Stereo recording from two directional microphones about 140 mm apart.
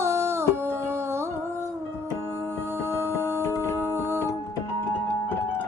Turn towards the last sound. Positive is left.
turn(degrees=-15)  # may be behind; listen again after turning